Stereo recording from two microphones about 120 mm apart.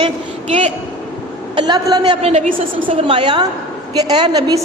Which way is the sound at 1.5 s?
35° right (ahead or behind).